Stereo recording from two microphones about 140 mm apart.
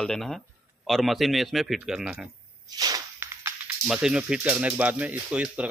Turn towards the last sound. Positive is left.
turn(degrees=-10)  # may be behind; listen again after turning